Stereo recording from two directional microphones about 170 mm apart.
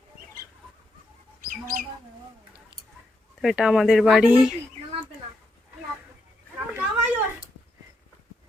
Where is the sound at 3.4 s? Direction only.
Centre (ahead or behind).